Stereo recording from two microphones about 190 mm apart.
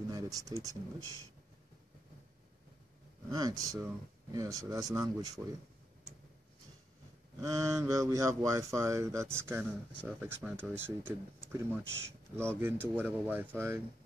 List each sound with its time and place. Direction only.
0.1 s speech: 20° right (ahead or behind)
3.3 s speech: 20° right (ahead or behind)
7.4 s speech: 15° right (ahead or behind)